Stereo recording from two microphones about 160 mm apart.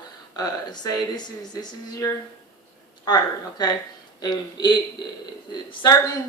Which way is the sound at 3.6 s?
25° left (ahead or behind).